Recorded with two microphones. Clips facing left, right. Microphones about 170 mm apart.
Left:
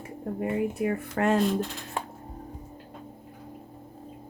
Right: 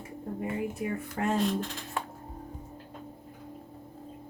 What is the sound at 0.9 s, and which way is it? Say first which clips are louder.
Speech: left 6 dB; 75° left (ahead or behind).